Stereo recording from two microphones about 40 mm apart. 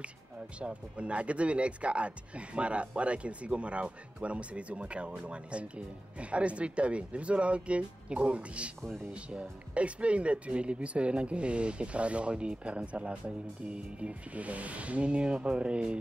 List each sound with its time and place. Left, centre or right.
0.6 s speech: right